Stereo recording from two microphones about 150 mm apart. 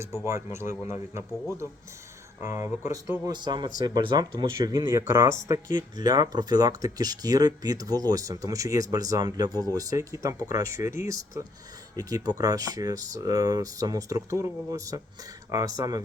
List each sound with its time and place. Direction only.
0.3 s speech: 20° right (ahead or behind)
2.4 s speech: 15° right (ahead or behind)